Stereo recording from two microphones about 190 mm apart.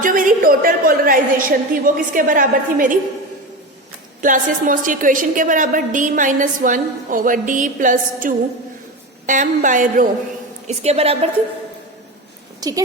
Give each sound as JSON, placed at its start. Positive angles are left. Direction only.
{"t": 0.0, "sound": "a woman's voice", "side_deg": -45}
{"t": 4.2, "sound": "a woman's voice", "side_deg": -45}
{"t": 10.7, "sound": "a woman's voice", "side_deg": -35}
{"t": 12.5, "sound": "a sound", "side_deg": -20}